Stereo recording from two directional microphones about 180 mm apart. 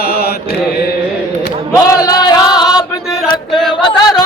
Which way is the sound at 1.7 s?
20° left (ahead or behind).